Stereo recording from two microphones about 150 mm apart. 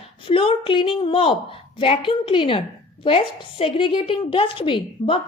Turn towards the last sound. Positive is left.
turn(degrees=35)  # may be behind; listen again after turning